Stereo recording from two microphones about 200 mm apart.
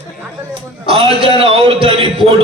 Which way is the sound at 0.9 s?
30° right (ahead or behind).